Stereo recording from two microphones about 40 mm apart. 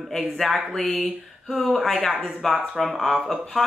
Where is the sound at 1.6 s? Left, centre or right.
Centre.